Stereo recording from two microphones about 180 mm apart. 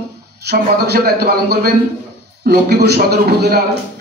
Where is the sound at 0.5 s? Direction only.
60° right (ahead or behind).